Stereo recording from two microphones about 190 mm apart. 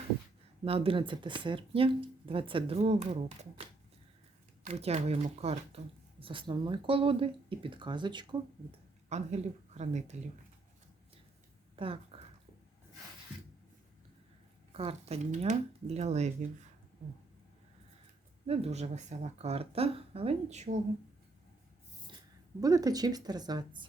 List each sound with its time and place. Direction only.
0.6 s speech: 30° right (ahead or behind)
4.6 s speech: 35° right (ahead or behind)
9.0 s speech: 35° right (ahead or behind)
11.8 s speech: 30° right (ahead or behind)
14.7 s speech: 30° right (ahead or behind)
18.4 s speech: 30° right (ahead or behind)
22.6 s speech: 20° right (ahead or behind)